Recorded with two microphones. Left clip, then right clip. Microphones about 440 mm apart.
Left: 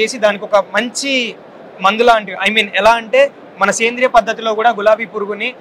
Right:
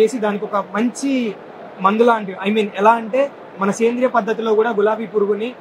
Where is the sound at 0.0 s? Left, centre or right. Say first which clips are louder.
Left 3 dB; left.